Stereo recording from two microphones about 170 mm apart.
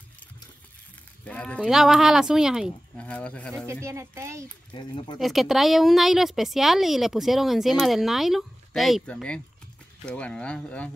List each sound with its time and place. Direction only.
1.2 s speech: 5° left (ahead or behind)
3.1 s speech: 10° left (ahead or behind)
3.8 s speech: 15° right (ahead or behind)
4.7 s speech: 25° left (ahead or behind)
5.2 s speech: centre (ahead or behind)